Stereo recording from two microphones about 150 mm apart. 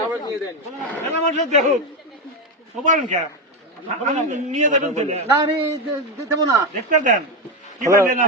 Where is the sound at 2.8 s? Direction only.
55° right (ahead or behind).